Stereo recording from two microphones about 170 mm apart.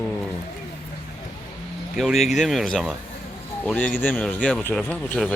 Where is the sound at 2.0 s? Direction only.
Centre (ahead or behind).